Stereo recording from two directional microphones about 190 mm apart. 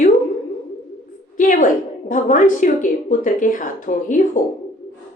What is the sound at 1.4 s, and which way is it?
A woman's voice, 40° left (ahead or behind).